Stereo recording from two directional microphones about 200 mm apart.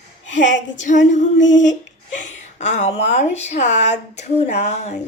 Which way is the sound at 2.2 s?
35° left (ahead or behind).